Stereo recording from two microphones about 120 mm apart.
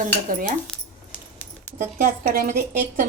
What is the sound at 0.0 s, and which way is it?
Speech, 90° right.